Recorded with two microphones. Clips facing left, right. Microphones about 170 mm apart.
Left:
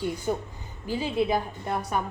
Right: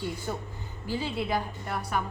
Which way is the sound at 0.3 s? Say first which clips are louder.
Left 6 dB; 20° left (ahead or behind).